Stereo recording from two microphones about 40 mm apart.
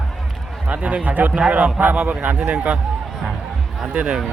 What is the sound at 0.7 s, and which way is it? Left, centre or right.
A man's voice, right.